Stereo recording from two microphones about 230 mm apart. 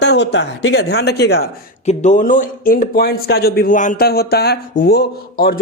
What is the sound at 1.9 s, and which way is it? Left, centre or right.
Speech, left.